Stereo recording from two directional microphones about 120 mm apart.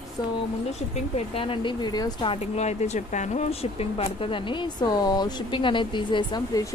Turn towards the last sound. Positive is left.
turn(degrees=35)  # may be behind; listen again after turning